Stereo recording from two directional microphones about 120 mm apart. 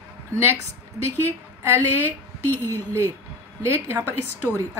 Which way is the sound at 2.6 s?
25° right (ahead or behind).